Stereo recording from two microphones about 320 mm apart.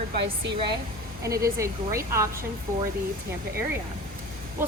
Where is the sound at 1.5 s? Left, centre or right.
Centre.